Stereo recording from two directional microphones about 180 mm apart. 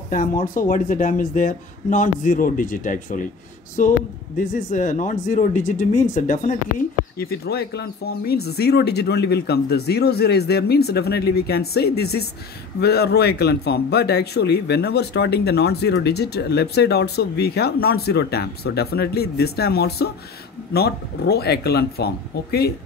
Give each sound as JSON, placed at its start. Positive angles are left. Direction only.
{"t": 0.1, "sound": "speech", "side_deg": 50}
{"t": 7.2, "sound": "a man's voice", "side_deg": 60}